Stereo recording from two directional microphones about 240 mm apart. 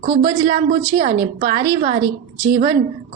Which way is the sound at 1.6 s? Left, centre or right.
Centre.